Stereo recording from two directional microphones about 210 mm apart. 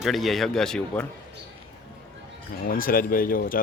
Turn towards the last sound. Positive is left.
turn(degrees=40)  # may be behind; listen again after turning